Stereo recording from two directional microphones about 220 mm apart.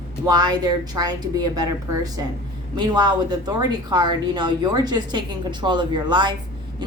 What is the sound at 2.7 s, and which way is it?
A woman's voice, 20° right (ahead or behind).